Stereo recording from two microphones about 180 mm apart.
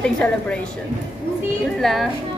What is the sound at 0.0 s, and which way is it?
Speech, 5° left (ahead or behind).